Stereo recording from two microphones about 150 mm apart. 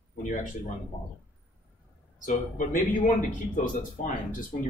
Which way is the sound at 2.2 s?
60° left (ahead or behind).